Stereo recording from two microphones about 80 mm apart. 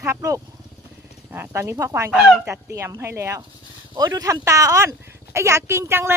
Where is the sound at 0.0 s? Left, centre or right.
Right.